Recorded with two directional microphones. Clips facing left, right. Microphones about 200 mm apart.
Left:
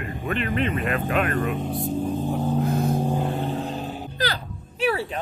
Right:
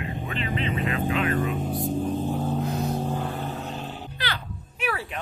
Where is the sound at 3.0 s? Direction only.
15° left (ahead or behind).